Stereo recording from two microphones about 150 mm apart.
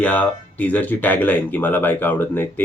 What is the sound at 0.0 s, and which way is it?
Speech, 10° left (ahead or behind).